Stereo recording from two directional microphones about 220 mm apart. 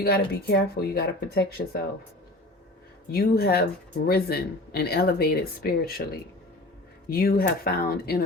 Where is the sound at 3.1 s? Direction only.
45° left (ahead or behind).